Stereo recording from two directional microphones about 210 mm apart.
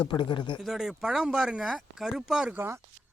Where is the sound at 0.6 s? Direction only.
Centre (ahead or behind).